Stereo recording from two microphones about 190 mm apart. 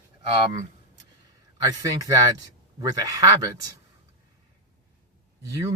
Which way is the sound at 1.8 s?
20° right (ahead or behind).